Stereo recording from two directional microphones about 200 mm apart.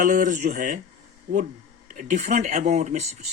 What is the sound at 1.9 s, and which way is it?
Speech, 40° right (ahead or behind).